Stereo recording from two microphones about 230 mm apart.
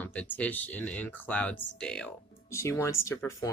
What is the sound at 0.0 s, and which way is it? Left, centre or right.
Speech, centre.